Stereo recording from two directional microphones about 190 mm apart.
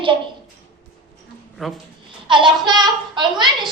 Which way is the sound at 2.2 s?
25° right (ahead or behind).